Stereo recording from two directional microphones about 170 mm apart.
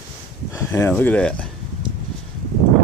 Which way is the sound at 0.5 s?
15° left (ahead or behind).